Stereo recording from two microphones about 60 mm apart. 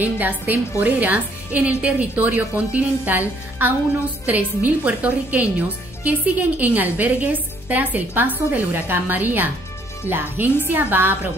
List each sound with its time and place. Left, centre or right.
0.0 s a woman's voice: right